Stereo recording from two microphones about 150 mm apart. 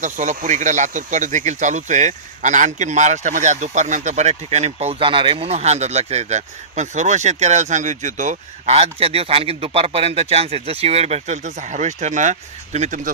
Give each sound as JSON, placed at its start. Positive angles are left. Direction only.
{"t": 0.0, "sound": "speech", "side_deg": -55}